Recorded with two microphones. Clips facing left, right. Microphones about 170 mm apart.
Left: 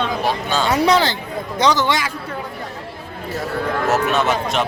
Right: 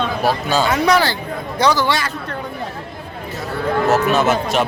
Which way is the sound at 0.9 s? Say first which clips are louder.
Right 1 dB; 20° left (ahead or behind).